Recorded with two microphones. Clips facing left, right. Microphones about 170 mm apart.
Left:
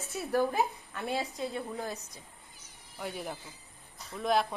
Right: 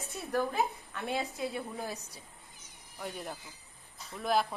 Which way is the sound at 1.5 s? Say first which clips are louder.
Left 2 dB; 15° right (ahead or behind).